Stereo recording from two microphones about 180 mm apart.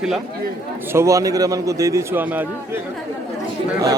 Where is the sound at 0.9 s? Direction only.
15° right (ahead or behind).